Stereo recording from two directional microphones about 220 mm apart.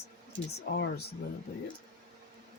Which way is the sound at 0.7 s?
45° left (ahead or behind).